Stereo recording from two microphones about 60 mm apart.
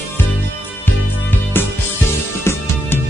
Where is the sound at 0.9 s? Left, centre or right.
Left.